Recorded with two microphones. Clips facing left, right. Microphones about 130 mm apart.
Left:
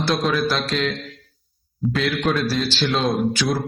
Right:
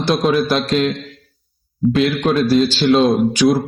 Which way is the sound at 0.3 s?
25° right (ahead or behind).